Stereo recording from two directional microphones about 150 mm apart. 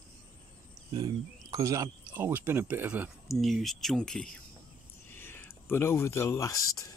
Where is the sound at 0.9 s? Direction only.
25° right (ahead or behind); by 6.9 s 20° left (ahead or behind).